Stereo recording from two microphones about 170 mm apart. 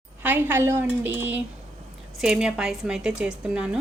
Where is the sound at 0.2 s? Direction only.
10° right (ahead or behind).